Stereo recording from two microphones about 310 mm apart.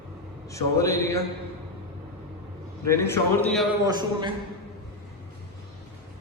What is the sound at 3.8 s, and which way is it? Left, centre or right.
Speech, centre.